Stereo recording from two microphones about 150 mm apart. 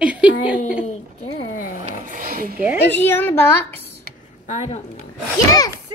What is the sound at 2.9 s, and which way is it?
Speech, 15° left (ahead or behind).